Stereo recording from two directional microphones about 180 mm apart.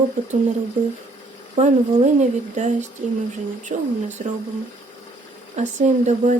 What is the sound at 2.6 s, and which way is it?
Speech, 40° right (ahead or behind).